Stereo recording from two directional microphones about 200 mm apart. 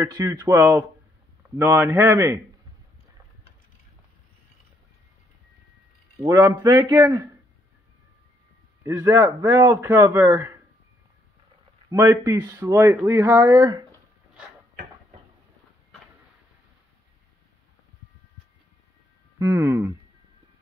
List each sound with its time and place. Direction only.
0.0 s speech: 15° right (ahead or behind)
6.2 s a man's voice: 20° right (ahead or behind)
8.8 s speech: 15° right (ahead or behind)
11.9 s speech: 15° right (ahead or behind)
19.3 s speech: 15° right (ahead or behind)